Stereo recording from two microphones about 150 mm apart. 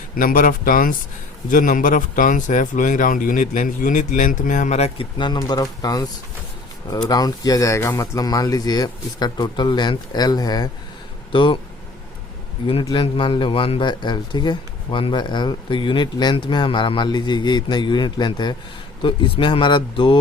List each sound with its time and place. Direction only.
0.2 s speech: 65° left (ahead or behind); by 6.1 s 25° left (ahead or behind)
7.1 s speech: 25° left (ahead or behind)
12.8 s speech: 35° left (ahead or behind)